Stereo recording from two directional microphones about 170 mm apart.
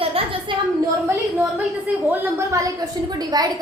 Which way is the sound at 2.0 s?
20° right (ahead or behind).